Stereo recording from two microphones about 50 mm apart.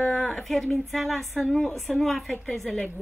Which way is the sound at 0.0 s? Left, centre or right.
Centre.